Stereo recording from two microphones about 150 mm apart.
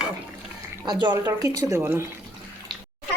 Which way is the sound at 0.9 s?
30° right (ahead or behind).